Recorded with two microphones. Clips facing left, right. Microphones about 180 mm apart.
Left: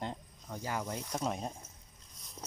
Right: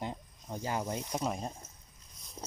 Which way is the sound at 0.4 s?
20° right (ahead or behind).